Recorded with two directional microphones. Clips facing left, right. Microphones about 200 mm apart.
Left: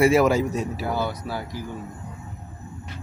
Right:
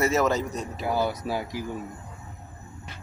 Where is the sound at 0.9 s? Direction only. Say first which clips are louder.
Right 1 dB; 15° right (ahead or behind).